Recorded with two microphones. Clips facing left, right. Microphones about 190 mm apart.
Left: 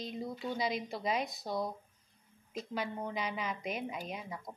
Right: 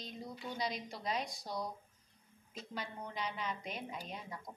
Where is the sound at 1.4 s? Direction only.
50° left (ahead or behind).